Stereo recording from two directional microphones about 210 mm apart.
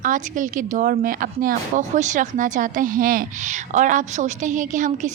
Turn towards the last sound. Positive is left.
turn(degrees=-35)  # may be behind; listen again after turning